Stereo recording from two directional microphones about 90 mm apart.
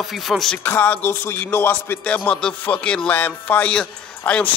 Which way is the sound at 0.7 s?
20° left (ahead or behind).